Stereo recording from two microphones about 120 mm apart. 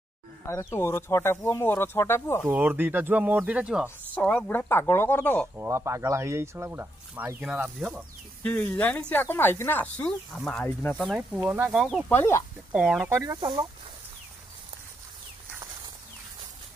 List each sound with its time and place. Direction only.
0.5 s speech: 25° left (ahead or behind)
2.5 s speech: 15° right (ahead or behind)
4.1 s speech: 10° left (ahead or behind)
5.6 s speech: 25° right (ahead or behind)
7.4 s speech: 10° right (ahead or behind)
8.4 s speech: 10° left (ahead or behind)
11.0 s speech: centre (ahead or behind)
11.4 s speech: 15° right (ahead or behind)
11.7 s speech: centre (ahead or behind)
12.1 s speech: 20° left (ahead or behind)
12.7 s speech: 10° right (ahead or behind)
13.1 s speech: 25° right (ahead or behind)
13.4 s speech: 40° right (ahead or behind)